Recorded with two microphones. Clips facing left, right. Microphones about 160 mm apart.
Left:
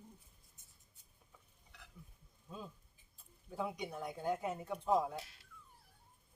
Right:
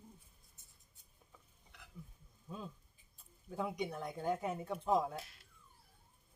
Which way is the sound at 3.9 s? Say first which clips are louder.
Right 1 dB; 10° left (ahead or behind).